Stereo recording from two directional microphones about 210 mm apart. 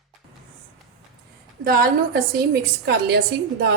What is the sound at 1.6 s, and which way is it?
A woman's voice, 45° right (ahead or behind).